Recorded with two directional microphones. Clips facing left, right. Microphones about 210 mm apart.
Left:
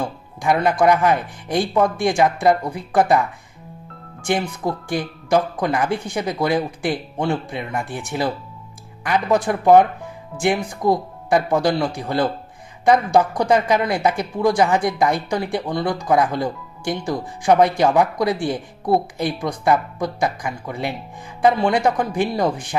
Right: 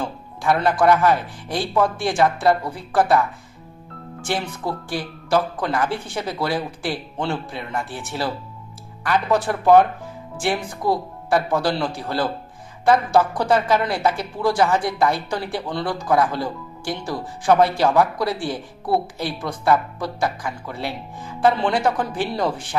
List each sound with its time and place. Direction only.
0.0 s speech: 10° left (ahead or behind)
4.3 s speech: 15° left (ahead or behind)